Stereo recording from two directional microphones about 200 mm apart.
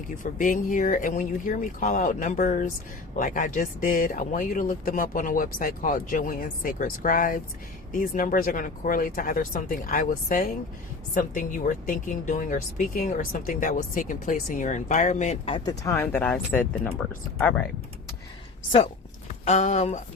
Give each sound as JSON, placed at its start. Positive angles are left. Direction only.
{"t": 0.2, "sound": "speech", "side_deg": 40}
{"t": 19.3, "sound": "speech", "side_deg": 35}